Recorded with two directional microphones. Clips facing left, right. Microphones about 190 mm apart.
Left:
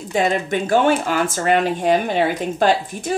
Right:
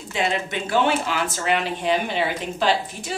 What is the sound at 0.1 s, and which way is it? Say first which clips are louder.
Speech: left 6 dB; 45° left (ahead or behind).